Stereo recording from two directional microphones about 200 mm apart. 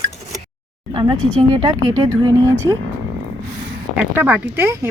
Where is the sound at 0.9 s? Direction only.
25° right (ahead or behind).